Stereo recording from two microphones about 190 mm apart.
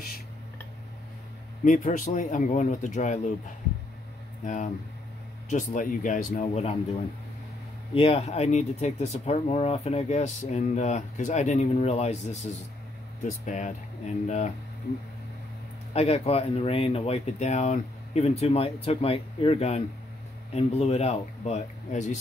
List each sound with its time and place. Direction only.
1.6 s speech: 40° left (ahead or behind)
5.5 s speech: 40° left (ahead or behind)
7.9 s speech: 30° left (ahead or behind)
15.9 s speech: 35° left (ahead or behind)